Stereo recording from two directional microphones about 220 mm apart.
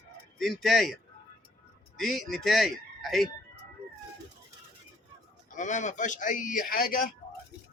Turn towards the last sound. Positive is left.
turn(degrees=40)  # may be behind; listen again after turning